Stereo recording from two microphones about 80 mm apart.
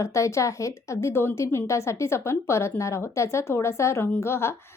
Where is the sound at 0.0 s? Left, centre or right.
Left.